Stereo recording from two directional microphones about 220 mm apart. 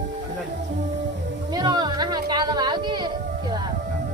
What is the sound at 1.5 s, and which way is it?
Music, 20° right (ahead or behind).